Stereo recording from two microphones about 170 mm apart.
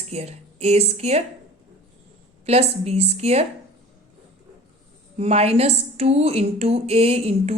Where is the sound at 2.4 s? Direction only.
40° right (ahead or behind).